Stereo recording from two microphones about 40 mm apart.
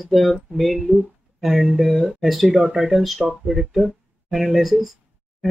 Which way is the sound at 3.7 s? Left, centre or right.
Centre.